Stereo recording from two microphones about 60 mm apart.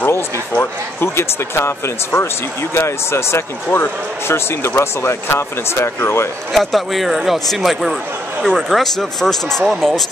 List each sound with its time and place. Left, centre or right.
0.1 s speech: left
2.7 s speech: left
6.5 s speech: centre